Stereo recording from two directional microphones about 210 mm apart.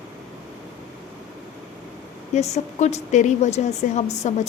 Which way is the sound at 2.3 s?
30° left (ahead or behind).